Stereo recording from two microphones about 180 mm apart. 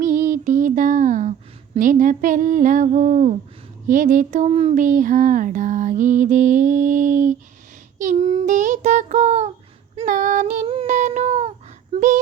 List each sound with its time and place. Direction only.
0.0 s a sound: 45° right (ahead or behind)
3.8 s speech: 45° right (ahead or behind)
10.7 s child singing: 40° right (ahead or behind)
11.9 s speech: 45° right (ahead or behind)